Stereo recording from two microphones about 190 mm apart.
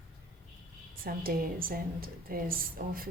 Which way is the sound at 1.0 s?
50° right (ahead or behind).